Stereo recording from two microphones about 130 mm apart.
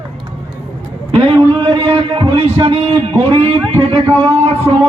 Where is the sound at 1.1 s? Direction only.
45° right (ahead or behind).